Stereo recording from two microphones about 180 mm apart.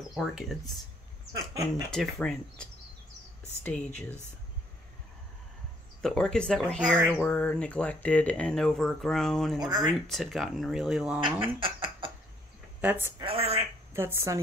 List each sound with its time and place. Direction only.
0.1 s speech: centre (ahead or behind)
1.3 s speech: 20° right (ahead or behind)
1.9 s speech: centre (ahead or behind)
6.0 s speech: 5° left (ahead or behind)
9.6 s speech: 25° right (ahead or behind)
9.9 s speech: centre (ahead or behind)
11.4 s a sound: 30° right (ahead or behind)
12.8 s a woman's voice: 10° right (ahead or behind)
13.2 s a woman's voice: 30° right (ahead or behind)
13.9 s a woman's voice: 15° right (ahead or behind)